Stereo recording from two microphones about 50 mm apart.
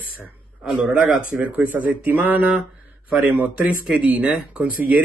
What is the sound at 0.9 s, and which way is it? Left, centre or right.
Speech, right.